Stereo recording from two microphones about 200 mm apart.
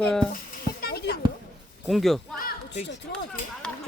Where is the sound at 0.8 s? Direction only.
50° left (ahead or behind).